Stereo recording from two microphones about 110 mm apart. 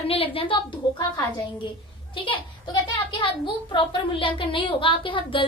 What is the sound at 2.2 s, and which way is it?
A woman's voice, 50° left (ahead or behind).